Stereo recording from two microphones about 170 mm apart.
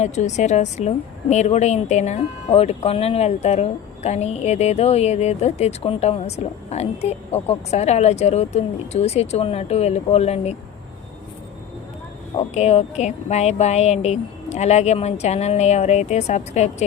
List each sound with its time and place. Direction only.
0.0 s a woman's voice: 40° left (ahead or behind)
12.5 s a woman's voice: 40° left (ahead or behind)